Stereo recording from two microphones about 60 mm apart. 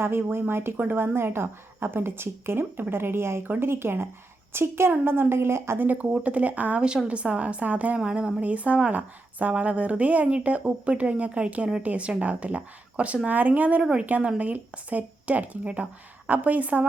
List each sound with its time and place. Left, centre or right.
0.0 s a woman's voice: right
5.8 s speech: right
7.9 s speech: centre